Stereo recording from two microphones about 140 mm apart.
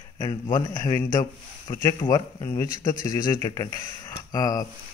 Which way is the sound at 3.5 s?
45° left (ahead or behind).